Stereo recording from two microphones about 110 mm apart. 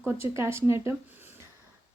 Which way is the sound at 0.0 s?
20° right (ahead or behind).